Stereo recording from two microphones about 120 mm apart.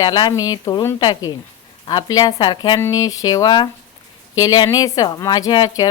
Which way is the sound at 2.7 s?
30° left (ahead or behind).